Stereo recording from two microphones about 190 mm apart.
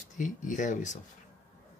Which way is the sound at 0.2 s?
40° left (ahead or behind).